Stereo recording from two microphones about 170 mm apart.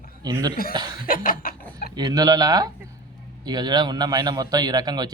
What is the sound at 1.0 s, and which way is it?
Chuckle, 55° left (ahead or behind).